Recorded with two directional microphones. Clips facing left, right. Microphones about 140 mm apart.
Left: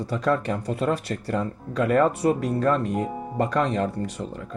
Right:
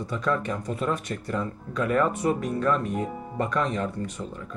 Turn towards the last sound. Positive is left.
turn(degrees=35)  # may be behind; listen again after turning